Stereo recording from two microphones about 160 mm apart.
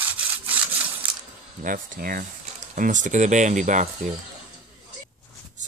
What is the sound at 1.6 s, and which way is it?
Speech, 60° right (ahead or behind).